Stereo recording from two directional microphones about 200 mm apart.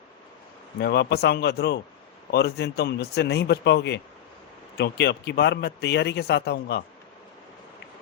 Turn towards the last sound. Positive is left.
turn(degrees=55)  # may be behind; listen again after turning